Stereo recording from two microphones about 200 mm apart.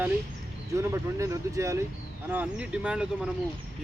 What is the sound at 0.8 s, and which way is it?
Speech, 15° right (ahead or behind).